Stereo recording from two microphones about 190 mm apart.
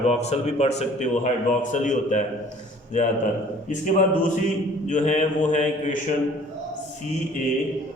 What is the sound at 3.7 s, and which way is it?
A man's voice, 40° left (ahead or behind).